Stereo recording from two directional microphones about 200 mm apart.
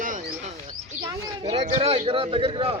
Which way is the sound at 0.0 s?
35° right (ahead or behind).